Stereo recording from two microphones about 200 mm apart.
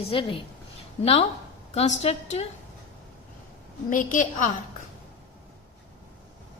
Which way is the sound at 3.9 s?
40° left (ahead or behind).